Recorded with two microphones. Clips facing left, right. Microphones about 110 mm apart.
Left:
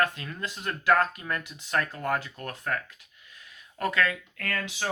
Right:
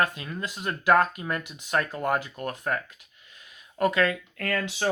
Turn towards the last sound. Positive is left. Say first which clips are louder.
# right 5 dB
turn(degrees=-30)  # may be behind; listen again after turning